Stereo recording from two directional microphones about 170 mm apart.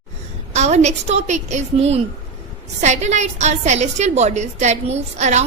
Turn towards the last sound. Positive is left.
turn(degrees=-40)  # may be behind; listen again after turning